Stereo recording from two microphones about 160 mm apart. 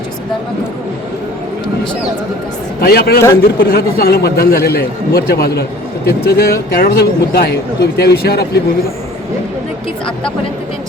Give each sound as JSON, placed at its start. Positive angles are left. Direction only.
{"t": 2.8, "sound": "a man's voice", "side_deg": 80}